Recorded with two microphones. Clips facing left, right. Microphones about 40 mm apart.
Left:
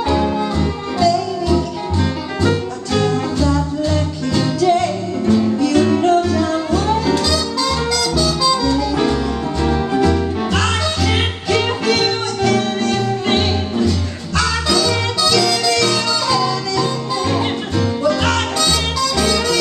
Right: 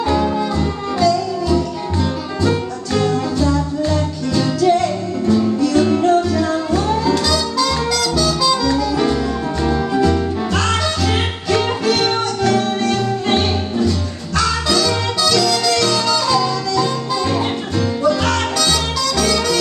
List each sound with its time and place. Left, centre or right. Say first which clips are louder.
0.1 s music: even; centre
2.4 s music: even; left
3.3 s music: even; centre
5.2 s music: even; centre
5.8 s music: even; centre
7.2 s music: right 1 dB; centre
11.5 s music: even; centre
18.3 s music: even; centre